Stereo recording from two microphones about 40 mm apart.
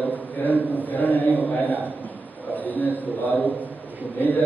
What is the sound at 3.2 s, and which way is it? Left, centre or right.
A man's voice, left.